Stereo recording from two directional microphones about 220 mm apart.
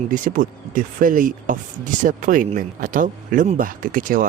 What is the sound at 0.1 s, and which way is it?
Speech, 40° right (ahead or behind).